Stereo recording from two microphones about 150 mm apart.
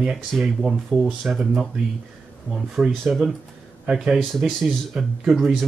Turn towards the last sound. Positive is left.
turn(degrees=-5)  # may be behind; listen again after turning